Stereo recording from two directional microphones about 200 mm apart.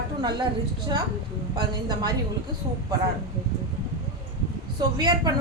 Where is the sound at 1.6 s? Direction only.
20° right (ahead or behind).